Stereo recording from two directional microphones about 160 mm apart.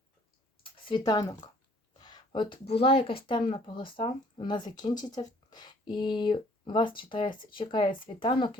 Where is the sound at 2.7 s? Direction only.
35° left (ahead or behind).